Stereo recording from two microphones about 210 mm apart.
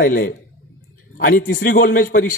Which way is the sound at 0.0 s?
40° left (ahead or behind).